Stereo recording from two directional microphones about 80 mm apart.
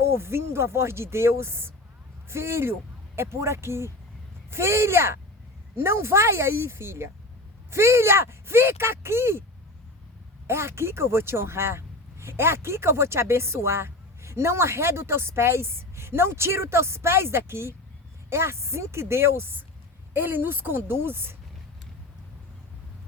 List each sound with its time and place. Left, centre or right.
0.0 s speech: right
10.4 s a woman's voice: right